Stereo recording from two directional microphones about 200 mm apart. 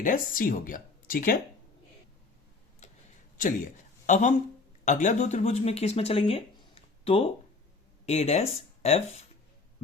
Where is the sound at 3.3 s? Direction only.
40° left (ahead or behind).